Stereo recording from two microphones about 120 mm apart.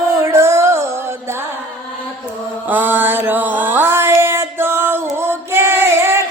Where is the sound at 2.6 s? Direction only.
15° right (ahead or behind).